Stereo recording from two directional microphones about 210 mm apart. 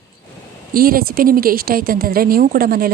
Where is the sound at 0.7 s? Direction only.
45° right (ahead or behind).